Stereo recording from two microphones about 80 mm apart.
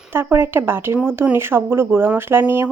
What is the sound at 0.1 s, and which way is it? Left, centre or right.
A woman's voice, right.